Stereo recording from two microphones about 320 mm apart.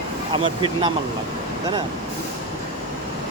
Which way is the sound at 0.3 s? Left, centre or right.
Centre.